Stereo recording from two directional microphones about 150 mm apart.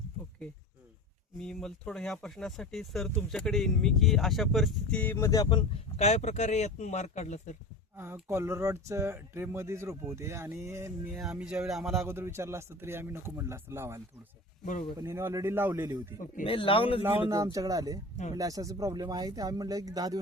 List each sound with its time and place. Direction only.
1.4 s speech: 5° left (ahead or behind); by 5.8 s 30° left (ahead or behind)
6.0 s speech: 50° left (ahead or behind)
7.9 s speech: 15° right (ahead or behind)
11.2 s speech: 5° right (ahead or behind)
12.0 s speech: 15° right (ahead or behind)
14.6 s speech: 55° left (ahead or behind)
14.9 s speech: 20° right (ahead or behind)
16.5 s speech: 35° left (ahead or behind)
17.0 s speech: 15° right (ahead or behind)